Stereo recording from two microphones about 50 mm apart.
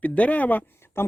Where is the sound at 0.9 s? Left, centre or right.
Left.